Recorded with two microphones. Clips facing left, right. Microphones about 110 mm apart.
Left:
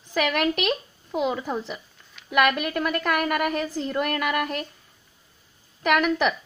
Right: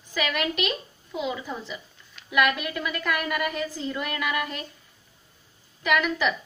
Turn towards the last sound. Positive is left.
turn(degrees=60)  # may be behind; listen again after turning